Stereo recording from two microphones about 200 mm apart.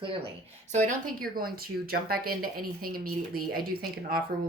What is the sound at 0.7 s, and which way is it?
Speech, 40° right (ahead or behind).